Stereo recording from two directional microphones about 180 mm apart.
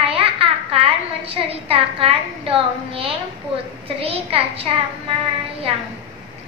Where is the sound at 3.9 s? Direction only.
30° right (ahead or behind).